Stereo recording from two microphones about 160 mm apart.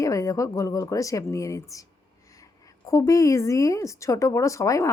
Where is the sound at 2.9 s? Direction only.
20° left (ahead or behind).